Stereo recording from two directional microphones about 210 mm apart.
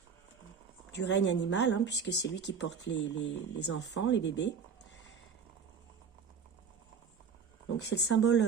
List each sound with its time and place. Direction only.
0.9 s speech: 60° left (ahead or behind)
3.9 s speech: 60° left (ahead or behind)
7.8 s speech: 55° left (ahead or behind)